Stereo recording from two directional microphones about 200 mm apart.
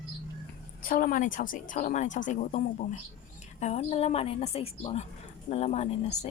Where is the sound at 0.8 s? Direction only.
45° left (ahead or behind).